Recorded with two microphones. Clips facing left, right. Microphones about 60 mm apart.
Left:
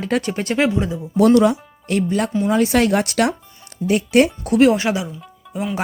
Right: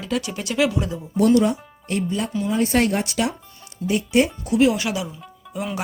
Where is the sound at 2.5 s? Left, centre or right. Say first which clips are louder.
Left 3 dB; left.